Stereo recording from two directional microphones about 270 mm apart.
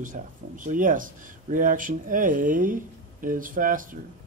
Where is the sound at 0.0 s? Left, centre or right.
Right.